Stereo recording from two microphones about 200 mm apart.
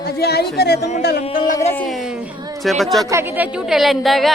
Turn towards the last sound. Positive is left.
turn(degrees=0)  # may be behind; listen again after turning